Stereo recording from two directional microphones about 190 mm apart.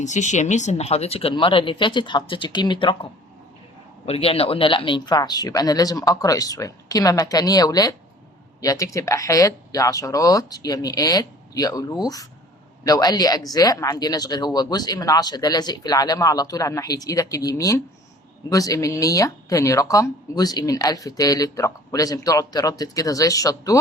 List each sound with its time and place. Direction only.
0.0 s speech: 40° left (ahead or behind); by 23.7 s 20° left (ahead or behind)